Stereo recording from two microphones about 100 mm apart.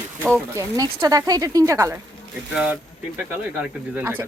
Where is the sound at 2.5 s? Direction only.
10° right (ahead or behind).